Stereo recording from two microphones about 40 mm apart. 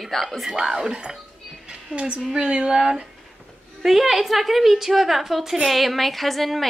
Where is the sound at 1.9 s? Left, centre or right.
Right.